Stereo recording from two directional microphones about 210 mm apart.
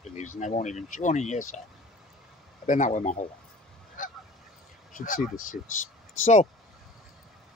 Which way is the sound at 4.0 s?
40° left (ahead or behind).